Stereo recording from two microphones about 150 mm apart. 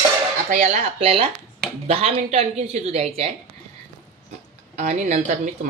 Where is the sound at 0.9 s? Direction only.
40° right (ahead or behind).